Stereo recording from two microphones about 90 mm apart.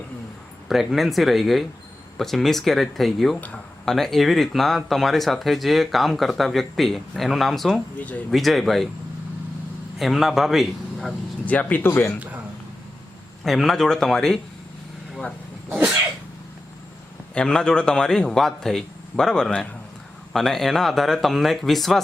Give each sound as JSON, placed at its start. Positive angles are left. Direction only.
{"t": 0.7, "sound": "speech", "side_deg": 0}
{"t": 10.0, "sound": "speech", "side_deg": 0}
{"t": 11.4, "sound": "speech", "side_deg": 20}
{"t": 13.4, "sound": "speech", "side_deg": 5}
{"t": 15.7, "sound": "sneeze", "side_deg": -15}
{"t": 17.3, "sound": "a man's voice", "side_deg": 10}